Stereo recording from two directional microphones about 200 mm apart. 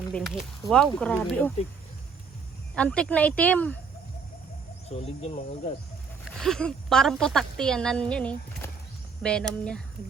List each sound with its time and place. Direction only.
0.1 s a woman's voice: centre (ahead or behind)
2.7 s speech: 5° left (ahead or behind)
4.9 s speech: 30° left (ahead or behind)
6.4 s a woman's voice: 5° left (ahead or behind)